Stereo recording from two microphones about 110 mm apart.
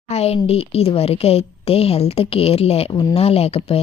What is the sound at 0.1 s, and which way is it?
A woman's voice, 70° left (ahead or behind).